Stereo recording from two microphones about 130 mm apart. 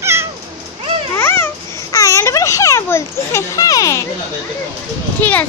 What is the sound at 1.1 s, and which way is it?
Babbling, 15° left (ahead or behind).